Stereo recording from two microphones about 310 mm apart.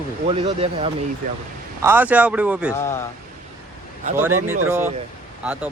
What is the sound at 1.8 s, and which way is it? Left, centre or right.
Speech, centre.